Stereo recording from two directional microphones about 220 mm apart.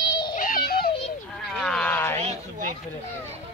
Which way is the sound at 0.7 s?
45° left (ahead or behind).